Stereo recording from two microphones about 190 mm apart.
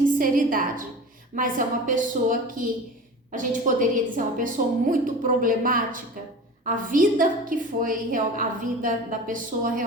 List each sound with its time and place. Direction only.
0.2 s a woman's voice: 45° right (ahead or behind)